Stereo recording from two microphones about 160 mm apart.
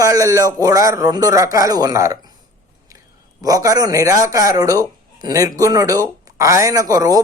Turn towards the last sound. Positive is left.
turn(degrees=-20)  # may be behind; listen again after turning